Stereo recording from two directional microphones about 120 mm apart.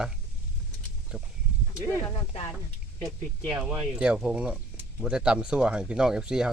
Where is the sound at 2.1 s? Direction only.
45° left (ahead or behind).